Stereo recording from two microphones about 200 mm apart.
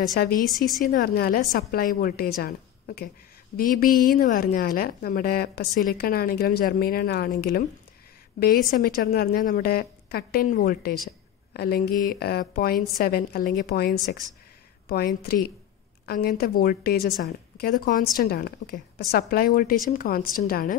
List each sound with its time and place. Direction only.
0.1 s a woman's voice: 45° left (ahead or behind)
0.5 s a woman's voice: centre (ahead or behind)
0.8 s a woman's voice: 50° left (ahead or behind)
8.6 s a woman's voice: 45° left (ahead or behind)